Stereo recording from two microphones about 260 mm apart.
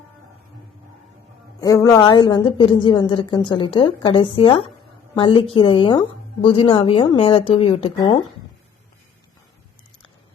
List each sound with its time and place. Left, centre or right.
1.6 s a woman's voice: centre